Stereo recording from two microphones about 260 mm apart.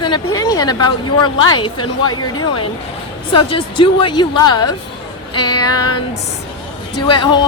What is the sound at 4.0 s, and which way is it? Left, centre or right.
Speech, centre.